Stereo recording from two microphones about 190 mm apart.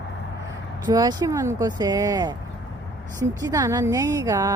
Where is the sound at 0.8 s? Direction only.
20° right (ahead or behind).